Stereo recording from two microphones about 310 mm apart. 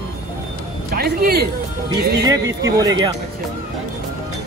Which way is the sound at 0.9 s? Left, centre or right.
Right.